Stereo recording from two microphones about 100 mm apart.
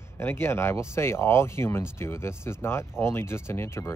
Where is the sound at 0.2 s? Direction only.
25° left (ahead or behind).